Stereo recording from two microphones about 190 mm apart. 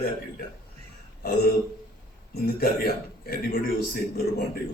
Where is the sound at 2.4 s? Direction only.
50° left (ahead or behind).